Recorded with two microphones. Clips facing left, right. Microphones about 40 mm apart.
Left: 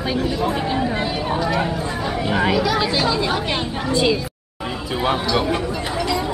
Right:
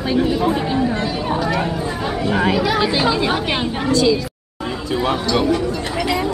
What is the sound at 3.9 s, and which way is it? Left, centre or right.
Speech, left.